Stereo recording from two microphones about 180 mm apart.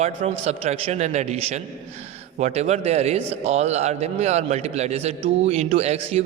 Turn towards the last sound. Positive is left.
turn(degrees=-35)  # may be behind; listen again after turning